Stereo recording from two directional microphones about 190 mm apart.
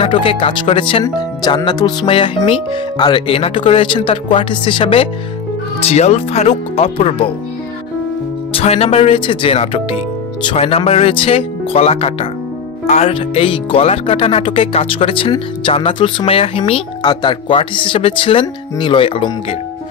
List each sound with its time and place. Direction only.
0.0 s speech: 30° left (ahead or behind)
8.5 s speech: 30° left (ahead or behind)